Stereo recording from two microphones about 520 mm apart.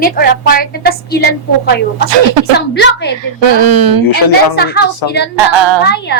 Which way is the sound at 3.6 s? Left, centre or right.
Right.